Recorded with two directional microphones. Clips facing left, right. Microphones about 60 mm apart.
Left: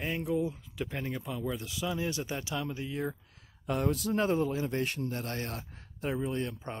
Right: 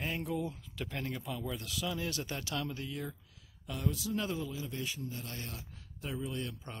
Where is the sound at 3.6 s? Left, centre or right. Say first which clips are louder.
Left 7 dB; left.